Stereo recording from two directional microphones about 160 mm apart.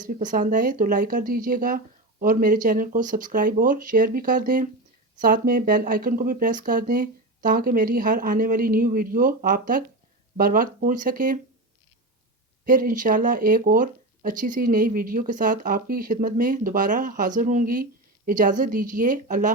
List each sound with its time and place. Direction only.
0.0 s speech: 55° right (ahead or behind)
12.6 s speech: 60° right (ahead or behind)